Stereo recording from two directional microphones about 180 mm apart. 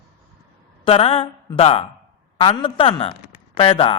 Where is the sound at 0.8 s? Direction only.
30° left (ahead or behind).